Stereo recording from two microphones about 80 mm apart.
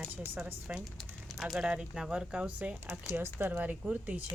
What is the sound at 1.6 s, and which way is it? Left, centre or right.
A woman's voice, centre.